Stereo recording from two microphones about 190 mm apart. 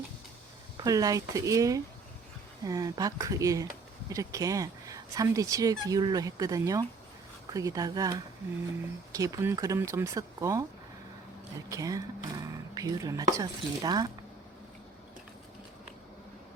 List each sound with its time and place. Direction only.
0.8 s speech: 20° right (ahead or behind)
11.7 s speech: 20° right (ahead or behind)